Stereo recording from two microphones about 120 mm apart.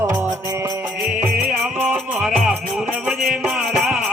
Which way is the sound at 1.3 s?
5° right (ahead or behind).